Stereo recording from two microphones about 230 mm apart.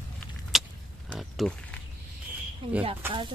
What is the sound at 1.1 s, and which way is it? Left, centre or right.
Speech, centre.